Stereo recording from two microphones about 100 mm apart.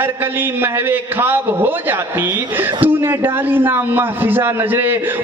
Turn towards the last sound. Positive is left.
turn(degrees=-20)  # may be behind; listen again after turning